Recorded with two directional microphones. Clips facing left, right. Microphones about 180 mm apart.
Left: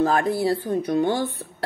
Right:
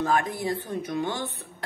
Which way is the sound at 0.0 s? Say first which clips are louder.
Left 5 dB; 35° left (ahead or behind).